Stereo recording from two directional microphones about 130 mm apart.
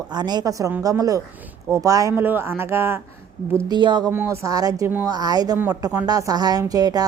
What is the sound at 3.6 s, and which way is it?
Speech, 35° right (ahead or behind).